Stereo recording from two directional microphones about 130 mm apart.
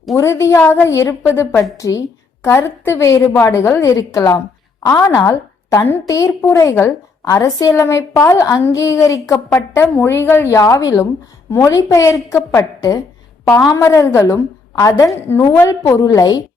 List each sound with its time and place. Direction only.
0.2 s a woman's voice: 20° left (ahead or behind)